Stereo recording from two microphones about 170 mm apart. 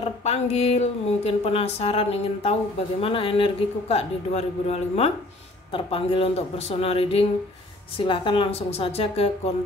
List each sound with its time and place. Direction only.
0.0 s speech: 40° left (ahead or behind)